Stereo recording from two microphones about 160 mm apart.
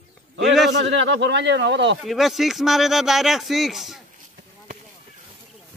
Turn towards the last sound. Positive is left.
turn(degrees=0)  # may be behind; listen again after turning